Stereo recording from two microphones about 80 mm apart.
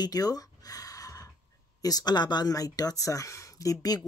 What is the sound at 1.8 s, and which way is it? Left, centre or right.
Speech, left.